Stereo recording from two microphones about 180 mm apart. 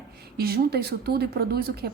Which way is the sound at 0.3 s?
60° right (ahead or behind).